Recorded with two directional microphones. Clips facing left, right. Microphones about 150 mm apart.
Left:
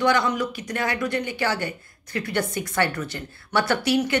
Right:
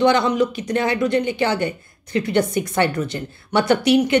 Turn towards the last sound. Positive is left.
turn(degrees=-20)  # may be behind; listen again after turning